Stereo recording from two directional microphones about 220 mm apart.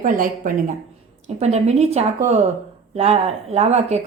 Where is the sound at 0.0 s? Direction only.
35° right (ahead or behind).